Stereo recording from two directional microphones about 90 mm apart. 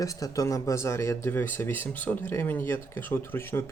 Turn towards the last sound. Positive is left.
turn(degrees=25)  # may be behind; listen again after turning